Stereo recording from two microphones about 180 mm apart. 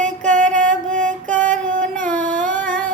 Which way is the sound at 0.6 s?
45° right (ahead or behind).